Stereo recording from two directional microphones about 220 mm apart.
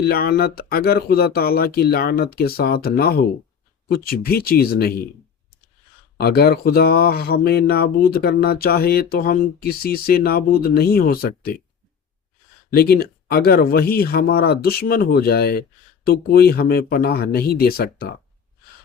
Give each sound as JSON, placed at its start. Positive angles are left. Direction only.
{"t": 0.0, "sound": "speech", "side_deg": 45}
{"t": 6.1, "sound": "speech", "side_deg": 45}
{"t": 12.7, "sound": "speech", "side_deg": 45}